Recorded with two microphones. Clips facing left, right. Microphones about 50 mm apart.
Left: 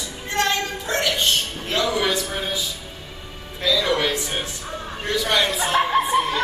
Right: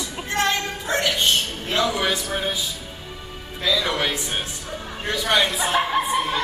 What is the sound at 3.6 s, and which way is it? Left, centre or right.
Speech, centre.